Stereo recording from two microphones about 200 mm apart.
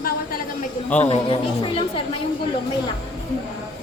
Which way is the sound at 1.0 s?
30° left (ahead or behind).